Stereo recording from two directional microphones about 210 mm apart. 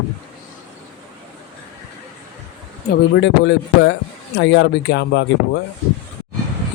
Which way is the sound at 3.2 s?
55° left (ahead or behind).